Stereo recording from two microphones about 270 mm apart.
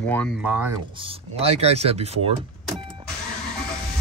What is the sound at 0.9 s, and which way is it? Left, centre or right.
Speech, right.